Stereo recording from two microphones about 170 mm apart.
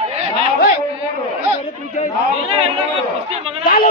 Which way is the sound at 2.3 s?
35° right (ahead or behind).